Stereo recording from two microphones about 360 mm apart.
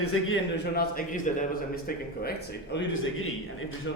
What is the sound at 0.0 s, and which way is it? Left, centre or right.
Speech, left.